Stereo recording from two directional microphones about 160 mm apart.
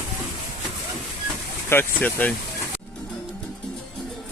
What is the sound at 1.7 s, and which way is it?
Speech, 10° left (ahead or behind).